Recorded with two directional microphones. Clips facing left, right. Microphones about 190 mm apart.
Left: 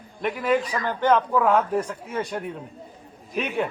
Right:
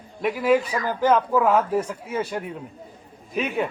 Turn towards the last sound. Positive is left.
turn(degrees=0)  # may be behind; listen again after turning